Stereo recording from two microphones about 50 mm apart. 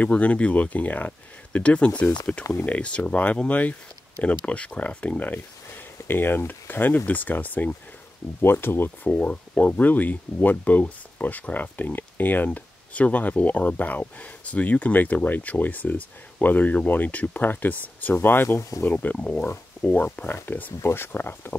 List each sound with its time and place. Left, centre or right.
0.0 s speech: left
6.0 s speech: left
8.4 s speech: left
9.0 s speech: left
18.6 s speech: left
18.9 s speech: left
19.1 s speech: centre; by 20.7 s left
20.8 s speech: left